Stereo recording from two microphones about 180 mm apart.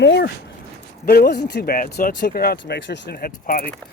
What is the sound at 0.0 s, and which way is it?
Speech, 70° left (ahead or behind).